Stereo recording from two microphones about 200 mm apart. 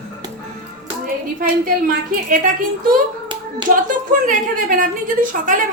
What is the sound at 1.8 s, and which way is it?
Speech, 45° right (ahead or behind).